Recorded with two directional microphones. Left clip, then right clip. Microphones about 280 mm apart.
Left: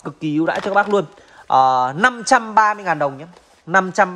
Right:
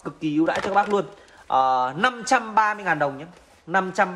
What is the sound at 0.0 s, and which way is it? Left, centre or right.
Speech, left.